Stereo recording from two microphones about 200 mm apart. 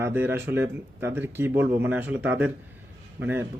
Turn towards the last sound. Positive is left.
turn(degrees=-10)  # may be behind; listen again after turning